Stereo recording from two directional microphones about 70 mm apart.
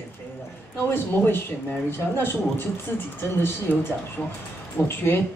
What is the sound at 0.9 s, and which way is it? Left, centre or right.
Speech, left.